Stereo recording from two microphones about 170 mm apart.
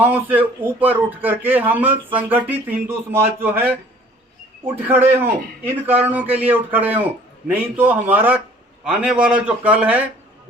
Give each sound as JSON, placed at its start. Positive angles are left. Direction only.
{"t": 0.0, "sound": "speech", "side_deg": -10}